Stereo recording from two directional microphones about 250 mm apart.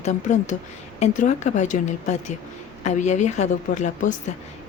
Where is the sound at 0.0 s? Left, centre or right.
Left.